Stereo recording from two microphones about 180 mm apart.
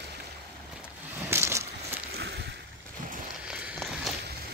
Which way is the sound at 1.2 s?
15° right (ahead or behind).